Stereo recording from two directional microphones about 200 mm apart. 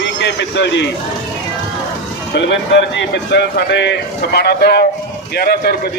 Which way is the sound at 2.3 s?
60° left (ahead or behind).